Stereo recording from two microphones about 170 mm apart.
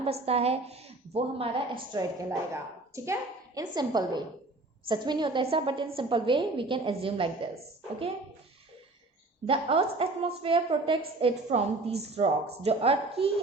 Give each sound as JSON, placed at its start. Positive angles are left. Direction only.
{"t": 0.0, "sound": "a woman's voice", "side_deg": -35}
{"t": 1.9, "sound": "a woman's voice", "side_deg": -25}
{"t": 9.5, "sound": "a woman's voice", "side_deg": -35}